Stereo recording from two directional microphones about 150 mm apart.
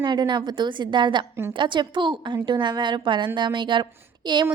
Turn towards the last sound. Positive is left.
turn(degrees=-30)  # may be behind; listen again after turning